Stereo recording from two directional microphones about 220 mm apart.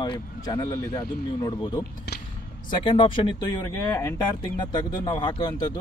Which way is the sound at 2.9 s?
20° left (ahead or behind).